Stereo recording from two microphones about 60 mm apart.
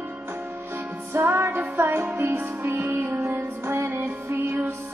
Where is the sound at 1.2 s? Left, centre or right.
Right.